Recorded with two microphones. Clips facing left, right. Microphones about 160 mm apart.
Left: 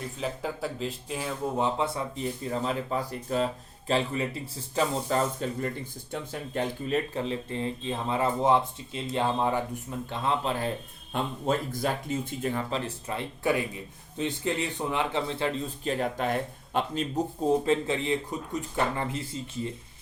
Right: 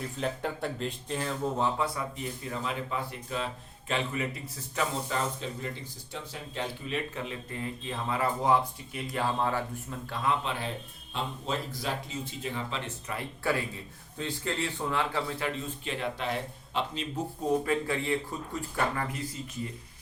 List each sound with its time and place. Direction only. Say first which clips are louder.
0.2 s speech: even; centre (ahead or behind)
1.6 s speech: left 2 dB; 25° left (ahead or behind)
10.4 s speech: left 5 dB; 40° left (ahead or behind)
13.1 s a man's voice: left 3 dB; 20° left (ahead or behind); by 17.1 s 50° left (ahead or behind)
17.5 s a man's voice: left 2 dB; 25° left (ahead or behind)